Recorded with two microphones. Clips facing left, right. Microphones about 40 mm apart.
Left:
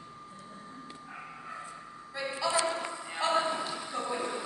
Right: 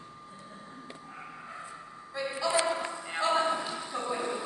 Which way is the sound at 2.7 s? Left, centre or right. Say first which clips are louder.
Right 2 dB; centre.